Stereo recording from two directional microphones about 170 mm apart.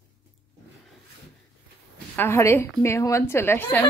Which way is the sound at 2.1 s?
15° left (ahead or behind).